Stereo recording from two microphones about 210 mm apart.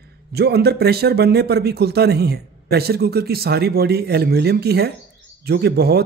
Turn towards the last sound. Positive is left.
turn(degrees=-50)  # may be behind; listen again after turning